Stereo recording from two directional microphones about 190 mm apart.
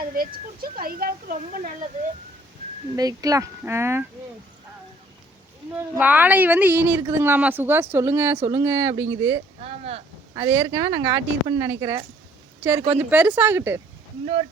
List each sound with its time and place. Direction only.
0.0 s a woman's voice: 50° right (ahead or behind)
2.9 s speech: 20° right (ahead or behind)
5.7 s speech: 10° right (ahead or behind)
9.6 s speech: 30° right (ahead or behind)
10.3 s speech: 15° right (ahead or behind)